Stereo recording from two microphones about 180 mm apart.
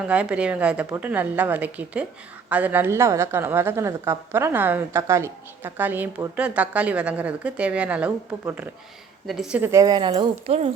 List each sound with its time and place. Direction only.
0.0 s a woman's voice: 5° right (ahead or behind)
9.7 s speech: 20° right (ahead or behind)